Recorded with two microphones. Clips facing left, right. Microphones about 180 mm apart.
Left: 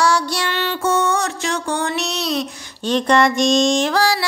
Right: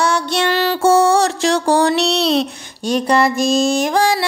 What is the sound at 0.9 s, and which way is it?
Music, 85° right.